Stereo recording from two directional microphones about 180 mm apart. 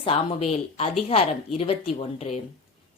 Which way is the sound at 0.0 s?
30° left (ahead or behind).